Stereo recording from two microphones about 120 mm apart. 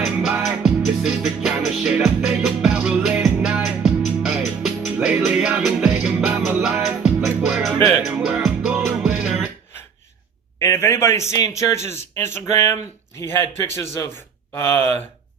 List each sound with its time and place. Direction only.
0.0 s music: 5° right (ahead or behind)
10.6 s a man's voice: 25° left (ahead or behind)